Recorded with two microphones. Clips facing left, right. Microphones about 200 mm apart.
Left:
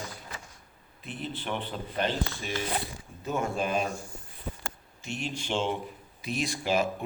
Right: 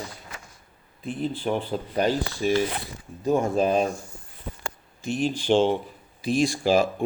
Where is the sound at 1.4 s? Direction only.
40° right (ahead or behind).